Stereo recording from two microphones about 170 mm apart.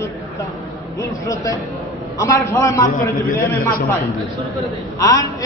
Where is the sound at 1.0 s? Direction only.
20° left (ahead or behind).